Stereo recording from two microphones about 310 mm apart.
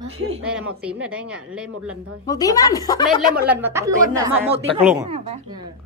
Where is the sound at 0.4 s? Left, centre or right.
Centre.